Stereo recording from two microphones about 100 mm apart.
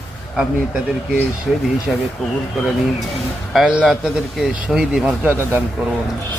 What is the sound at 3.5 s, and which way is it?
Speech, 5° right (ahead or behind).